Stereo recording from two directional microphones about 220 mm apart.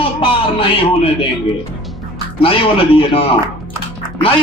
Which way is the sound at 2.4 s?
25° left (ahead or behind).